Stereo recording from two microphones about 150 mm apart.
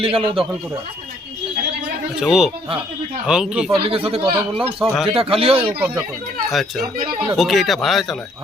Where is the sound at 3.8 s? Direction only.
40° right (ahead or behind).